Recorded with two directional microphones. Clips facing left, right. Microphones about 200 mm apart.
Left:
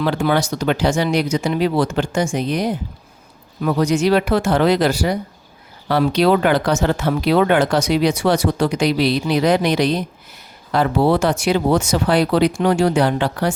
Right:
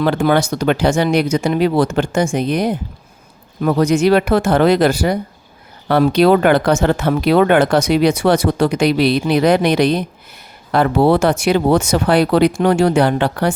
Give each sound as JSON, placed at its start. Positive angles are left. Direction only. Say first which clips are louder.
{"t": 0.0, "sound": "speech", "louder": "right 3 dB", "side_deg": -55}